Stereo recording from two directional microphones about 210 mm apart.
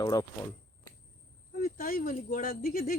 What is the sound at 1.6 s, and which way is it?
Speech, 45° left (ahead or behind).